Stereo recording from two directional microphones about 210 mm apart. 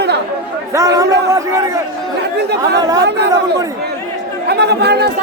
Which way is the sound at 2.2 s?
55° right (ahead or behind).